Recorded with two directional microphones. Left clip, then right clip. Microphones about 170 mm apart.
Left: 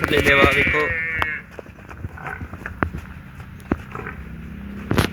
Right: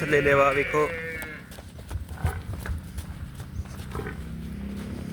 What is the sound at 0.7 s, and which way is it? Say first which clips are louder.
Sheep: left 5 dB; 15° right (ahead or behind).